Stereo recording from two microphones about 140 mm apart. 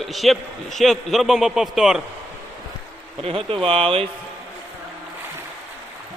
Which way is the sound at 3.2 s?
40° right (ahead or behind).